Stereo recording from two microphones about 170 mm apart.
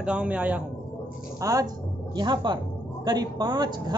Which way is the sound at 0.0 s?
5° right (ahead or behind).